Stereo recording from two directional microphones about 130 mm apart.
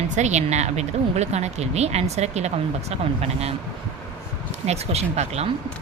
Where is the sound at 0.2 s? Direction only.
60° right (ahead or behind).